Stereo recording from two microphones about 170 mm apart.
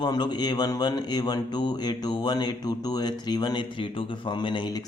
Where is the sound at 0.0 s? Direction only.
25° left (ahead or behind).